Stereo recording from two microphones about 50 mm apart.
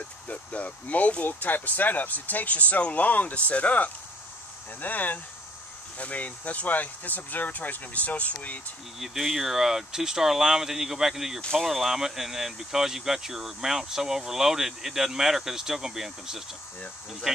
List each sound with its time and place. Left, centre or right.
0.3 s speech: left
9.0 s speech: centre